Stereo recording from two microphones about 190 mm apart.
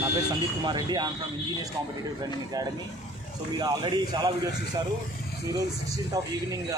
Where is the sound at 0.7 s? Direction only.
20° right (ahead or behind).